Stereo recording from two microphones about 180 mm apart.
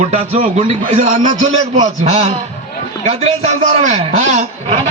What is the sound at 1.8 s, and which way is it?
Speech, 35° right (ahead or behind).